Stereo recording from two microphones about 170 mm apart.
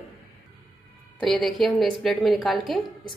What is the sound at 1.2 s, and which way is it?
A woman's voice, centre (ahead or behind).